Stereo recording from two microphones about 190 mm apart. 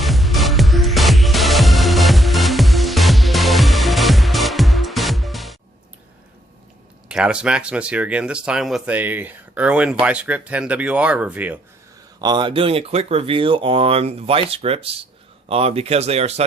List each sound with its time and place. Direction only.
0.0 s music: centre (ahead or behind)
7.1 s speech: 5° right (ahead or behind)
12.2 s speech: 25° right (ahead or behind)